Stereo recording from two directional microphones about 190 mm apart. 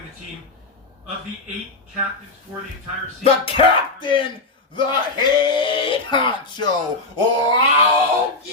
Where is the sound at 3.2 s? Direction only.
25° left (ahead or behind).